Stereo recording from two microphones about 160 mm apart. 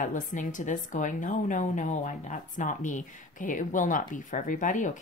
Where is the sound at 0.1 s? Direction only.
55° left (ahead or behind).